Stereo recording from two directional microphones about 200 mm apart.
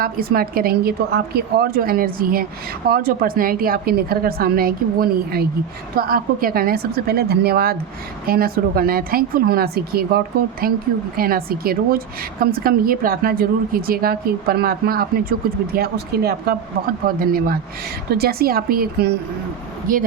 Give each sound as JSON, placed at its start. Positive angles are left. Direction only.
{"t": 0.0, "sound": "a woman's voice", "side_deg": -50}